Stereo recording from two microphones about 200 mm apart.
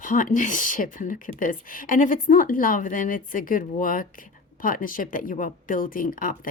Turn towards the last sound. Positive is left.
turn(degrees=45)  # may be behind; listen again after turning